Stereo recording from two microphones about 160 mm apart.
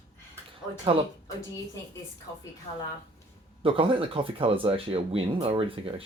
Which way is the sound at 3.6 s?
35° right (ahead or behind).